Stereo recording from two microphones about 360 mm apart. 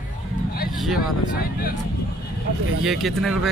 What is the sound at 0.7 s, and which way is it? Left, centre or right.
Speech, centre.